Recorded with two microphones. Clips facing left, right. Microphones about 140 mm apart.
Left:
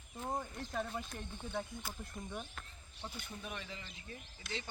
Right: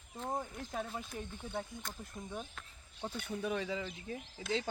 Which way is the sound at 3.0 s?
60° right (ahead or behind).